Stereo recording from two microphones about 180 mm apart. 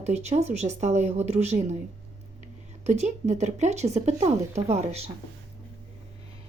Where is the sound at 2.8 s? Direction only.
40° right (ahead or behind).